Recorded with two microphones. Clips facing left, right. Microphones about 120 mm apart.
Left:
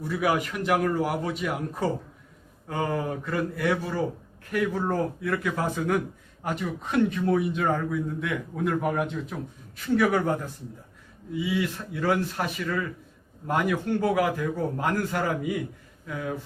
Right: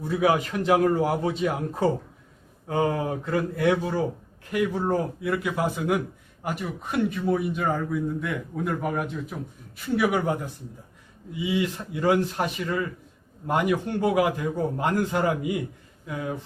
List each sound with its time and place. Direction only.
0.1 s a man's voice: 25° right (ahead or behind); by 9.3 s centre (ahead or behind)
10.0 s a man's voice: 15° right (ahead or behind)